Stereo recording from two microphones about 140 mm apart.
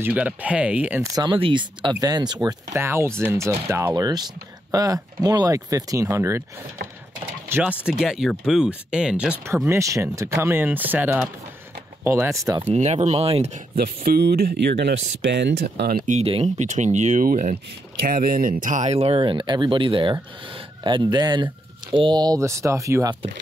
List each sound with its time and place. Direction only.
0.0 s speech: 10° right (ahead or behind)
1.1 s speech: 35° right (ahead or behind)
2.8 s speech: 15° right (ahead or behind)
7.4 s a sound: 15° right (ahead or behind)
7.8 s speech: 5° right (ahead or behind)
9.5 s speech: 20° right (ahead or behind)
12.7 s speech: 55° right (ahead or behind)
13.7 s speech: 90° right
16.1 s speech: 45° right (ahead or behind); by 17.6 s 70° right (ahead or behind)
18.0 s speech: 90° right; by 23.1 s 20° right (ahead or behind)